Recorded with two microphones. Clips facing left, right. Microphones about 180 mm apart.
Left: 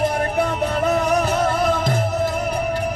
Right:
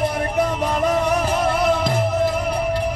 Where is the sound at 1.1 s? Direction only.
45° left (ahead or behind).